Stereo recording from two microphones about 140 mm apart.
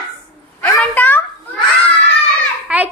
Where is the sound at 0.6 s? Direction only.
10° left (ahead or behind).